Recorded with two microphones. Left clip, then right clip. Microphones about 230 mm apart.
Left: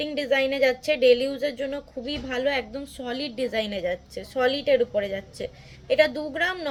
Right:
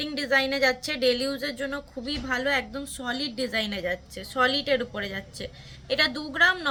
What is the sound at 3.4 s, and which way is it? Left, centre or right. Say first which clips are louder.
Speech: left 4 dB; right.